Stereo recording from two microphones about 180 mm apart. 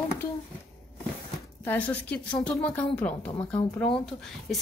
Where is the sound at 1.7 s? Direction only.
10° left (ahead or behind).